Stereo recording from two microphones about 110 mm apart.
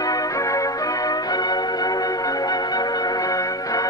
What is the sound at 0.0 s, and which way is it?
Music, 35° left (ahead or behind).